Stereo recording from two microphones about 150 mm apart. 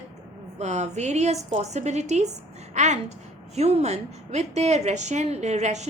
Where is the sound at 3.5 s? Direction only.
45° right (ahead or behind).